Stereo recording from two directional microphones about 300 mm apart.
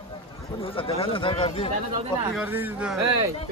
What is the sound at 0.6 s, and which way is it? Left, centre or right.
Speech, centre.